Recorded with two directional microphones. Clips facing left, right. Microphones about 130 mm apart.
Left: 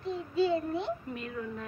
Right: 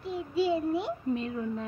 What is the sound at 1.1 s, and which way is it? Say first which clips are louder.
Speech: right 7 dB; 25° right (ahead or behind).